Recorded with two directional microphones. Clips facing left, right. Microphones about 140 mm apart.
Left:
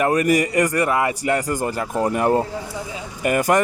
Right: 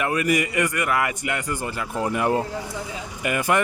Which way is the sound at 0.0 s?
40° left (ahead or behind).